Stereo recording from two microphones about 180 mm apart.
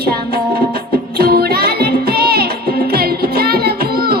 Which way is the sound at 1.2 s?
60° right (ahead or behind).